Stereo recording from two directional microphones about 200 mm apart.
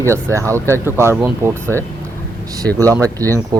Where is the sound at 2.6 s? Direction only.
15° right (ahead or behind).